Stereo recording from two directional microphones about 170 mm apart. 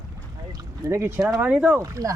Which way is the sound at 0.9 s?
15° right (ahead or behind).